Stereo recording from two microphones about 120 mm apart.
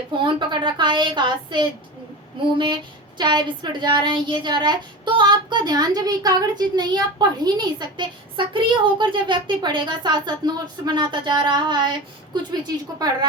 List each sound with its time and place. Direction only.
0.3 s a woman's voice: 40° right (ahead or behind)
3.2 s speech: 40° right (ahead or behind)